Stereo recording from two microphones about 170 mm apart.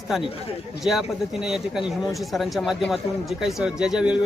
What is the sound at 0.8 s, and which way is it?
Speech, centre (ahead or behind).